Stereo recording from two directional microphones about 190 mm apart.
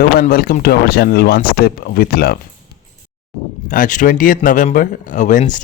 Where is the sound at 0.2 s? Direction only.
55° left (ahead or behind).